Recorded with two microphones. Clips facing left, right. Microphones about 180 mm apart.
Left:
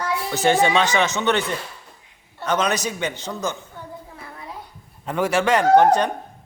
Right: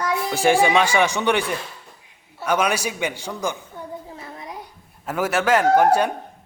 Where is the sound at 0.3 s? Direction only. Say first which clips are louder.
Right 1 dB; 10° right (ahead or behind).